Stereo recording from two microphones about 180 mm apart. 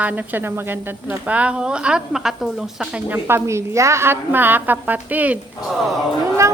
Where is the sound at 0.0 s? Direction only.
10° right (ahead or behind).